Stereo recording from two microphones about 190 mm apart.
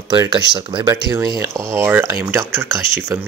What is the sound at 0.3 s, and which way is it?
Speech, 25° right (ahead or behind).